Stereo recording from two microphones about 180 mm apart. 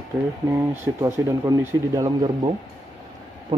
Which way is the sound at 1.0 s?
15° right (ahead or behind).